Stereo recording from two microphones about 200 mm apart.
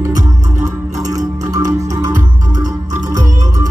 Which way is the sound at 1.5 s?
20° right (ahead or behind).